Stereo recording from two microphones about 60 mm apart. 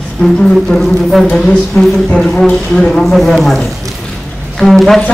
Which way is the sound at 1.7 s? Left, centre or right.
Centre.